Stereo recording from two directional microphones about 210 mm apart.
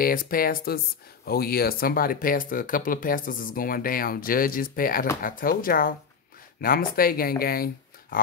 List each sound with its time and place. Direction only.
0.0 s speech: 45° left (ahead or behind)